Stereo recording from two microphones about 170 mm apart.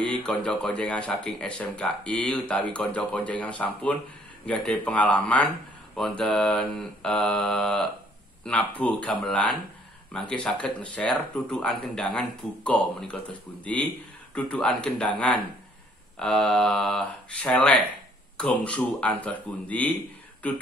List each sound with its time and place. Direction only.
0.2 s speech: 5° left (ahead or behind)
5.9 s mantra: 5° left (ahead or behind)
8.5 s speech: 10° left (ahead or behind)
16.2 s mantra: 5° left (ahead or behind)
18.4 s speech: 5° left (ahead or behind)